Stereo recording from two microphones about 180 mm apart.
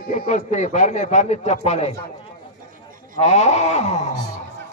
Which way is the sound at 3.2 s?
40° left (ahead or behind).